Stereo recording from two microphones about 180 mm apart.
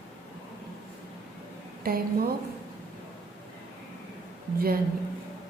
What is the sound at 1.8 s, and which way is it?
Speech, 55° right (ahead or behind).